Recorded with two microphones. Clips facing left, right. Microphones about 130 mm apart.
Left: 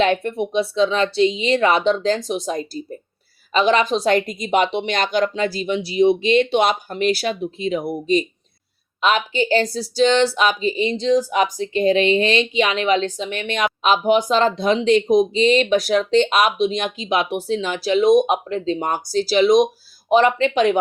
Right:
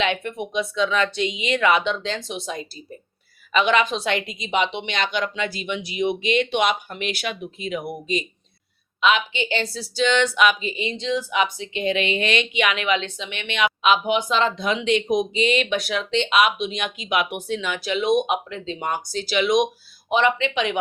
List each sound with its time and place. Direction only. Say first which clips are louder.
0.0 s speech: left 6 dB; 40° left (ahead or behind)